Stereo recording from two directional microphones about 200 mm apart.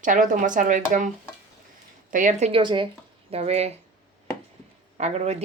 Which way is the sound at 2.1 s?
40° right (ahead or behind).